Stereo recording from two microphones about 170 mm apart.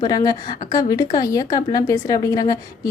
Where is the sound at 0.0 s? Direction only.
20° left (ahead or behind).